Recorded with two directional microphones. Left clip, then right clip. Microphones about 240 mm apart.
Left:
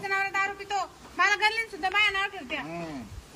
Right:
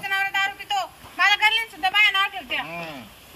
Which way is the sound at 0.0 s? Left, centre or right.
Centre.